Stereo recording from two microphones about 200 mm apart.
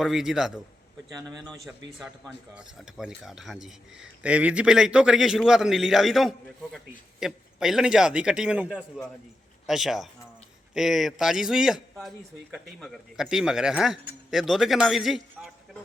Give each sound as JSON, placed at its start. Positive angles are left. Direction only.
{"t": 0.0, "sound": "speech", "side_deg": 0}
{"t": 9.6, "sound": "speech", "side_deg": 0}